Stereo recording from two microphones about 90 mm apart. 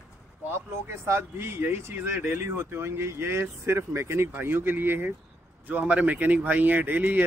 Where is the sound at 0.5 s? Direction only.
25° right (ahead or behind).